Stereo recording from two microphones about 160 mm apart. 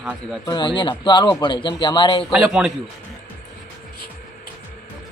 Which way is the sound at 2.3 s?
5° right (ahead or behind).